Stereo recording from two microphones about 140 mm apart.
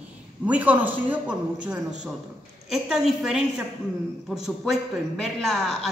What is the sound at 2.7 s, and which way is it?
A woman's voice, 5° right (ahead or behind).